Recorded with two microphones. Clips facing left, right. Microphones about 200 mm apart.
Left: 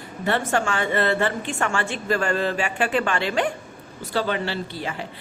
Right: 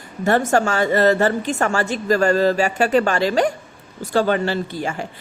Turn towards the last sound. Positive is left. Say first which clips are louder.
# right 5 dB
turn(degrees=-45)  # may be behind; listen again after turning